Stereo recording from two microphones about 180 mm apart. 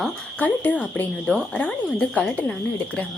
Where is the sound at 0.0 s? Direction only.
10° left (ahead or behind).